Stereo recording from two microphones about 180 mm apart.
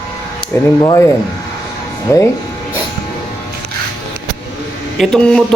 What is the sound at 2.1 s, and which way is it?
Speech, 15° left (ahead or behind).